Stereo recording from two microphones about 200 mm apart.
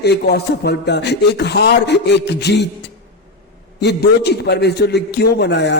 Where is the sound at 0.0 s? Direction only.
55° left (ahead or behind).